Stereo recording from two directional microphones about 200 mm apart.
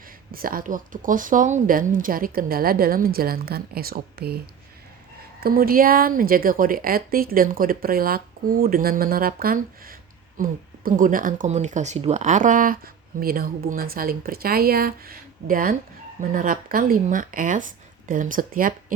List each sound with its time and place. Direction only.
0.3 s a woman's voice: 45° right (ahead or behind)
5.4 s a woman's voice: 50° right (ahead or behind)